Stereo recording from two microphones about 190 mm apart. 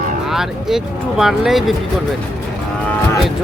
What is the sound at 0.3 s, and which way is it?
Speech, centre (ahead or behind).